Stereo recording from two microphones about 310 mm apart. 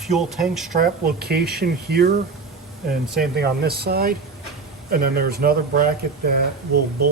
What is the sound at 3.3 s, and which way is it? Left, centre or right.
Speech, right.